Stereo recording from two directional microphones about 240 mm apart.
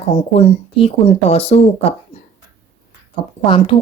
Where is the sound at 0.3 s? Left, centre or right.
Left.